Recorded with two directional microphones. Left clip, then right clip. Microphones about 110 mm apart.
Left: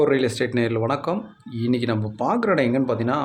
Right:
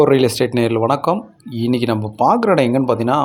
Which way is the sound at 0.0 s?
30° right (ahead or behind).